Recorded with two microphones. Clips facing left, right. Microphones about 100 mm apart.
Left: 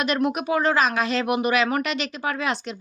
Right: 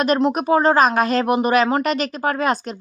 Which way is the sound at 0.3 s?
40° right (ahead or behind).